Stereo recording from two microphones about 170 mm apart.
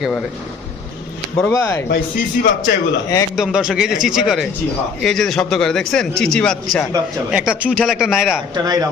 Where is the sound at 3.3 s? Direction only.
5° right (ahead or behind).